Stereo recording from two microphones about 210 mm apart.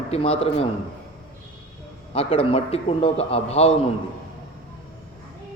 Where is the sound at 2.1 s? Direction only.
25° left (ahead or behind).